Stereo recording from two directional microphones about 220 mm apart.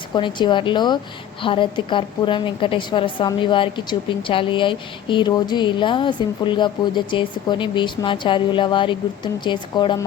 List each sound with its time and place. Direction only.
0.1 s a woman's voice: 20° left (ahead or behind)